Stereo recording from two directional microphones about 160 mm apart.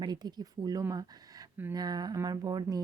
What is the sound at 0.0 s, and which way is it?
A woman's voice, 25° right (ahead or behind).